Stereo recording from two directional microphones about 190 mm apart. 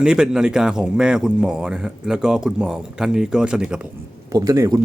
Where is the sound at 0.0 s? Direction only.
5° right (ahead or behind).